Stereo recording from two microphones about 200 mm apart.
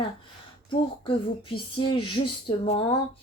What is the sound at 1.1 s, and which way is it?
A woman's voice, 25° left (ahead or behind).